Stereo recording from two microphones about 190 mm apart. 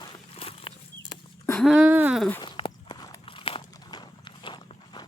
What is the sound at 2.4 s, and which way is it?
Walk, 25° left (ahead or behind).